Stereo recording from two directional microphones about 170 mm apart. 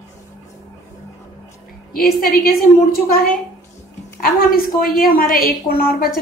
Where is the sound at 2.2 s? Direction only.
60° left (ahead or behind).